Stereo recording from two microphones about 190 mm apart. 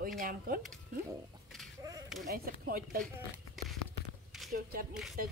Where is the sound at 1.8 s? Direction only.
20° right (ahead or behind).